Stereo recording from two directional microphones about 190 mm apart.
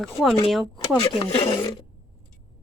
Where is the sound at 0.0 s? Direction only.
Centre (ahead or behind).